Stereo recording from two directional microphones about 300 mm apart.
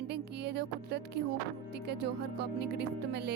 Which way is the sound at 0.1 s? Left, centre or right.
Right.